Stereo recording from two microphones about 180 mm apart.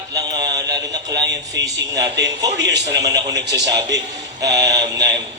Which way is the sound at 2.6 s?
75° right (ahead or behind).